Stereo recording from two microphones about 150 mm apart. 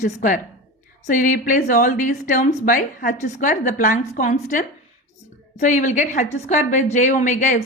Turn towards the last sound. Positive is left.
turn(degrees=55)  # may be behind; listen again after turning